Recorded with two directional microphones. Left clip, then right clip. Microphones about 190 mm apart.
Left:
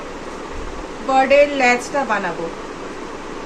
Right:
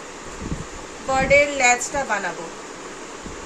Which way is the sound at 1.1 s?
35° right (ahead or behind).